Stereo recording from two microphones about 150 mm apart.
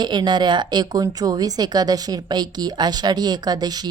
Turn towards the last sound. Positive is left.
turn(degrees=-25)  # may be behind; listen again after turning